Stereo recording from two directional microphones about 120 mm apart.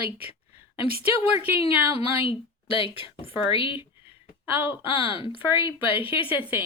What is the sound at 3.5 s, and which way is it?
Speech, 45° left (ahead or behind).